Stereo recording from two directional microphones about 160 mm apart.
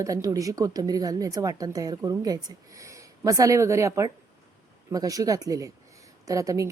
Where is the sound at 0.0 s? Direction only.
20° right (ahead or behind).